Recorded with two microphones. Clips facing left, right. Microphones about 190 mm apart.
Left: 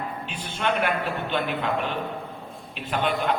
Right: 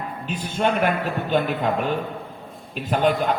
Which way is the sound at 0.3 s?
40° right (ahead or behind).